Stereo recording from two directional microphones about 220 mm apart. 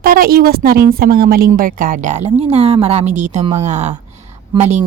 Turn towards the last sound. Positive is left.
turn(degrees=-30)  # may be behind; listen again after turning